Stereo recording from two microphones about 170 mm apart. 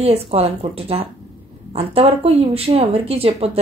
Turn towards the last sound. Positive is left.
turn(degrees=-35)  # may be behind; listen again after turning